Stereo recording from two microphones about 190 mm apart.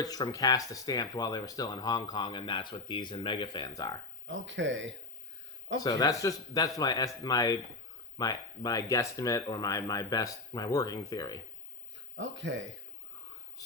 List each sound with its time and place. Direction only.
0.0 s speech: 20° left (ahead or behind)
4.3 s speech: 80° right
5.8 s speech: 20° left (ahead or behind)
12.1 s speech: 75° right (ahead or behind)
13.6 s a sound: 20° left (ahead or behind)